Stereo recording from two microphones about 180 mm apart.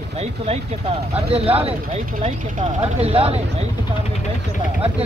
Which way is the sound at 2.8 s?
35° right (ahead or behind).